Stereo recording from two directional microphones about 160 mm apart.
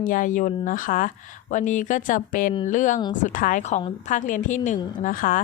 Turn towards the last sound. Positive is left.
turn(degrees=60)  # may be behind; listen again after turning